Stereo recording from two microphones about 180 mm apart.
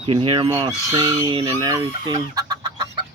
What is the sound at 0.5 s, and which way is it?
Chicken, 25° right (ahead or behind).